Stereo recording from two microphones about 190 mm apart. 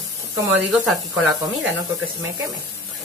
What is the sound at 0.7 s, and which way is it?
Speech, centre (ahead or behind).